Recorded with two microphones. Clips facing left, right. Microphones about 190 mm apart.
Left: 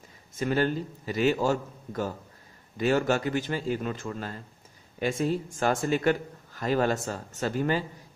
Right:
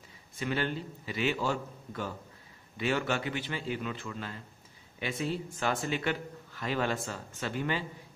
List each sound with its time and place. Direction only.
0.4 s a man's voice: 45° left (ahead or behind)